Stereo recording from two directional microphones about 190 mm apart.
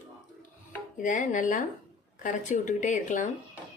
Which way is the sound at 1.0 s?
45° left (ahead or behind).